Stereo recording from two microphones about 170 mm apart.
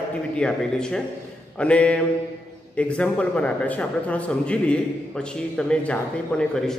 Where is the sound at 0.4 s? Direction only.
5° left (ahead or behind).